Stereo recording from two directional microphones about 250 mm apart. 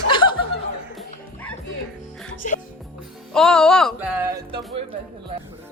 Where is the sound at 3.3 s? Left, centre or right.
Centre.